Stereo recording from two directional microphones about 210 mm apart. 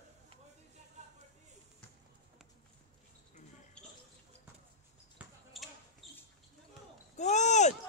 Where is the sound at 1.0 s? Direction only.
35° right (ahead or behind).